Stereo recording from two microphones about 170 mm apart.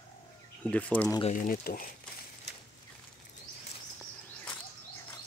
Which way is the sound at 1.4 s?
55° left (ahead or behind).